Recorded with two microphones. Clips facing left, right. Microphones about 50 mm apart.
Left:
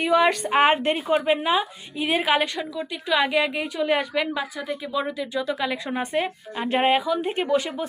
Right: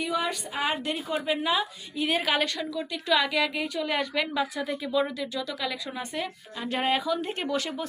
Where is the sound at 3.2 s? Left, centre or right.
Left.